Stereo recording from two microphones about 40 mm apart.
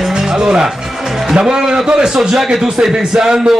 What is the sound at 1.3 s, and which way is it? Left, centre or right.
A man's voice, centre.